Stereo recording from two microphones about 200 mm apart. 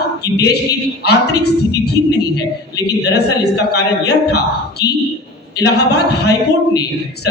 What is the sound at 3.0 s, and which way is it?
A woman's voice, 55° left (ahead or behind).